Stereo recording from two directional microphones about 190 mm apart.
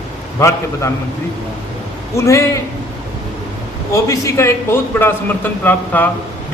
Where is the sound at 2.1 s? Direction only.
15° left (ahead or behind).